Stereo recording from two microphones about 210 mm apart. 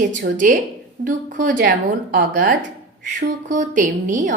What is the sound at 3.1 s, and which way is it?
A woman's voice, 35° right (ahead or behind).